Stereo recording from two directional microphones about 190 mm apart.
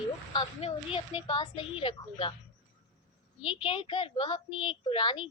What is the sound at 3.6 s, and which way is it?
A woman's voice, 25° left (ahead or behind).